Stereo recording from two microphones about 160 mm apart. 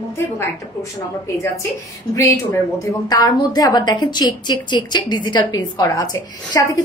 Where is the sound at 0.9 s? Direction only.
20° left (ahead or behind).